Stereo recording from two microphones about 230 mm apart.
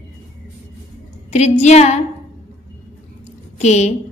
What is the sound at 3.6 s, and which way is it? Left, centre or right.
Speech, left.